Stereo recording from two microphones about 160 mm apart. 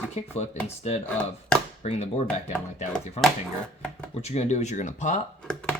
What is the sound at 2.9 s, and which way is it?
Speech, centre (ahead or behind).